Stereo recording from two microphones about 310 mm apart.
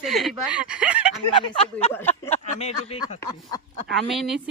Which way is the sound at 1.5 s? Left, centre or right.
Centre.